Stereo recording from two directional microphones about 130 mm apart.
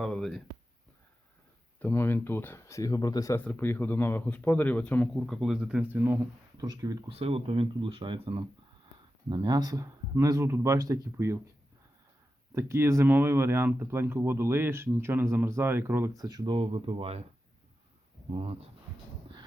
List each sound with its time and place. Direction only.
0.0 s speech: 5° left (ahead or behind)
1.8 s speech: 15° left (ahead or behind)
3.3 s a man's voice: 15° left (ahead or behind)
5.1 s speech: centre (ahead or behind); by 6.1 s 15° right (ahead or behind)
6.6 s speech: 30° right (ahead or behind)
7.1 s speech: 50° right (ahead or behind); by 11.3 s 25° right (ahead or behind)
12.5 s speech: 20° right (ahead or behind)
16.1 s speech: 30° right (ahead or behind); by 17.2 s 50° right (ahead or behind)
18.3 s speech: 50° right (ahead or behind)